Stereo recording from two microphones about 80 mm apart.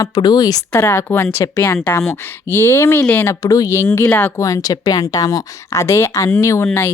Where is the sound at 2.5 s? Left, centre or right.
Left.